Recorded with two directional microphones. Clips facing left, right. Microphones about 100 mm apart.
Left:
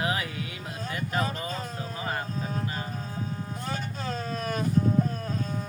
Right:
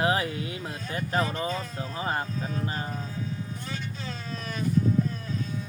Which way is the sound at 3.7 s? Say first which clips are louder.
Left 7 dB; 45° left (ahead or behind).